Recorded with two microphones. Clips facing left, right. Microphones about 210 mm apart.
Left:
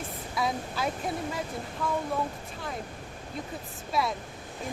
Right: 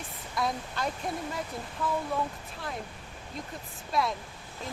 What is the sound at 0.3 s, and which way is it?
Speech, centre (ahead or behind).